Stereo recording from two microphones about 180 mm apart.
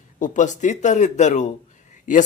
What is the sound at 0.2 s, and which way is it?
Speech, 40° left (ahead or behind).